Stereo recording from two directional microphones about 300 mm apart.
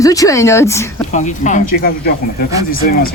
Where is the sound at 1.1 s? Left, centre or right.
Left.